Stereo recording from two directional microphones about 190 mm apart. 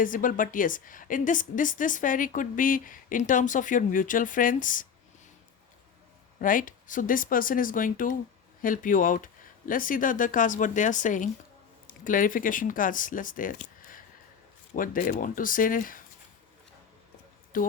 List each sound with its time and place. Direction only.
0.0 s a woman's voice: 45° left (ahead or behind)
6.4 s a woman's voice: 45° left (ahead or behind)
17.5 s speech: 45° left (ahead or behind)